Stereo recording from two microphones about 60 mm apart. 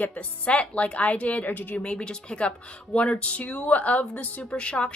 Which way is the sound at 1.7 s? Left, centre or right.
Centre.